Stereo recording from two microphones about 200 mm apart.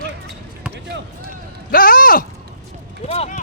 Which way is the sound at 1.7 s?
45° left (ahead or behind).